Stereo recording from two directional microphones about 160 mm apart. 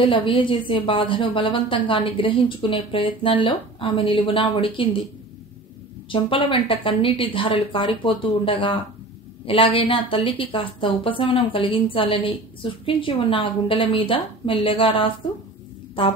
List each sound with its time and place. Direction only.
0.0 s a woman's voice: 35° left (ahead or behind)
6.0 s a woman's voice: 30° left (ahead or behind)